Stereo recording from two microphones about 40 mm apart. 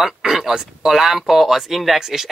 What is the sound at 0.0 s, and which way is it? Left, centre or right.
Speech, centre.